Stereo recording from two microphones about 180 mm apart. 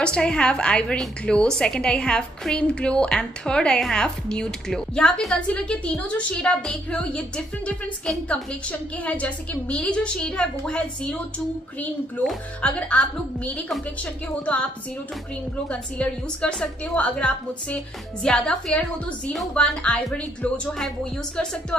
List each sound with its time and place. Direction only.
0.0 s a woman's voice: 5° left (ahead or behind)
15.7 s a woman's voice: 5° left (ahead or behind)